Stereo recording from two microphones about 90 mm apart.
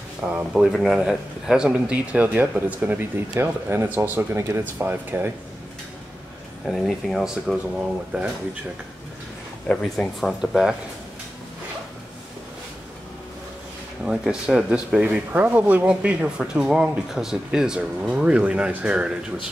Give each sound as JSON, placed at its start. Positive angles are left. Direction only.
{"t": 0.2, "sound": "speech", "side_deg": -5}
{"t": 6.6, "sound": "speech", "side_deg": 0}
{"t": 9.9, "sound": "speech", "side_deg": 0}
{"t": 14.0, "sound": "speech", "side_deg": -5}